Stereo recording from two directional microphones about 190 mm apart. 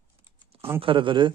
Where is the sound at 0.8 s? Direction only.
25° right (ahead or behind).